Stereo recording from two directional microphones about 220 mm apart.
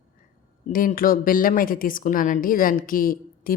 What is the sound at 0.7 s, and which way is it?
A woman's voice, 40° left (ahead or behind).